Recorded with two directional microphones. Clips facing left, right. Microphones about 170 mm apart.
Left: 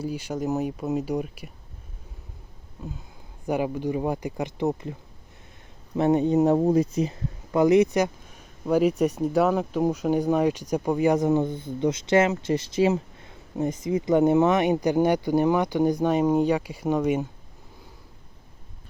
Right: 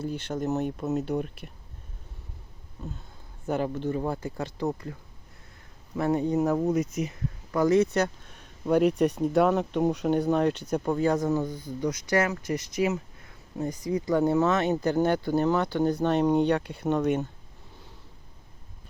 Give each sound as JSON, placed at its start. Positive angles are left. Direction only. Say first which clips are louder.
{"t": 0.0, "sound": "speech", "louder": "left 2 dB", "side_deg": 10}
{"t": 3.4, "sound": "speech", "louder": "left 2 dB", "side_deg": 10}
{"t": 6.0, "sound": "speech", "louder": "left 5 dB", "side_deg": 20}